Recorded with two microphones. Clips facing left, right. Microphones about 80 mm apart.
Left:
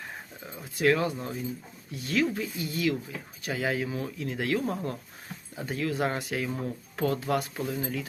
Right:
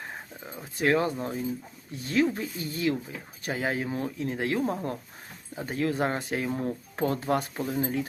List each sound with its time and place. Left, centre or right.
0.5 s speech: right